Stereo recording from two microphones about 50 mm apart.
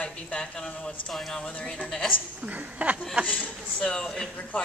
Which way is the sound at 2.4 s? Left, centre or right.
Right.